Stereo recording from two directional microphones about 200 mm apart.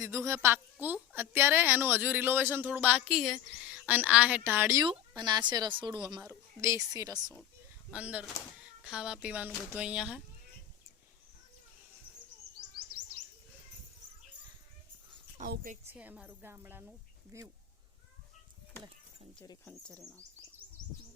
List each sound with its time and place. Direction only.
0.0 s a woman's voice: 15° right (ahead or behind)
4.9 s a woman's voice: 25° right (ahead or behind)
7.9 s speech: 5° right (ahead or behind)
12.9 s bird: 50° right (ahead or behind)
15.4 s a woman's voice: 40° right (ahead or behind)
15.9 s a woman's voice: 5° right (ahead or behind)
19.6 s speech: 10° left (ahead or behind)